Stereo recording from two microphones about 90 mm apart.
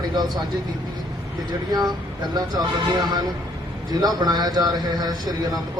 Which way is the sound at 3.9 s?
45° right (ahead or behind).